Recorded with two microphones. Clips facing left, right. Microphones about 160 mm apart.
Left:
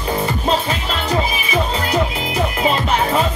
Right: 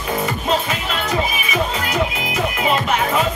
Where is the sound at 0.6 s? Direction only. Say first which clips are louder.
Left 2 dB; 30° left (ahead or behind).